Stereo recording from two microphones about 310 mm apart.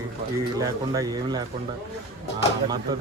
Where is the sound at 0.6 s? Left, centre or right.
Centre.